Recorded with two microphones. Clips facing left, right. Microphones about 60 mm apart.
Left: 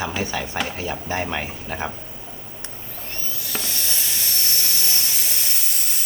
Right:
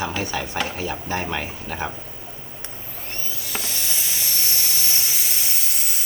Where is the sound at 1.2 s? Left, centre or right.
Centre.